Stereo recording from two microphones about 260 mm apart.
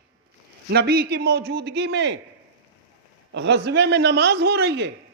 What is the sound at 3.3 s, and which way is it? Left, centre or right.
A man's voice, right.